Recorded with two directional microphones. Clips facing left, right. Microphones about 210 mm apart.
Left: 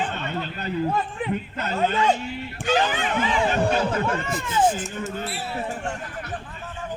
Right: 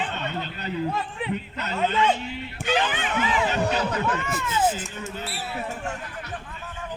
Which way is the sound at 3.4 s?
50° left (ahead or behind).